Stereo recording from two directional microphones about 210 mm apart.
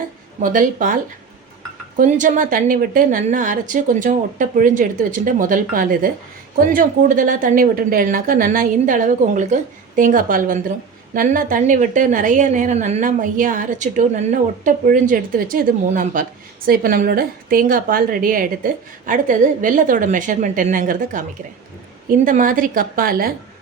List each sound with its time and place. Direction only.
0.4 s a woman's voice: 40° right (ahead or behind)
2.0 s a woman's voice: 35° right (ahead or behind)